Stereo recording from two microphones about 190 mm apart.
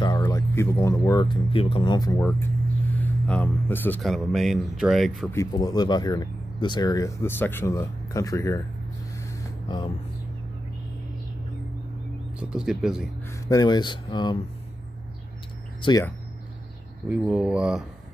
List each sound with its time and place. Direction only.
0.0 s speech: 20° left (ahead or behind); by 5.3 s centre (ahead or behind)
5.3 s speech: 20° left (ahead or behind)
9.1 s a sound: 20° left (ahead or behind)
12.4 s speech: 5° right (ahead or behind)
13.2 s speech: 15° left (ahead or behind)
15.8 s speech: 20° left (ahead or behind)
17.1 s speech: 5° right (ahead or behind)